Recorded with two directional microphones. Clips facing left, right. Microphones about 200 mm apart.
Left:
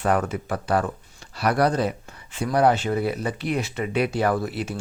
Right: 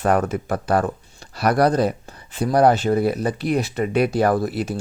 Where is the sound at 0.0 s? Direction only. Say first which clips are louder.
Right 3 dB; 45° right (ahead or behind).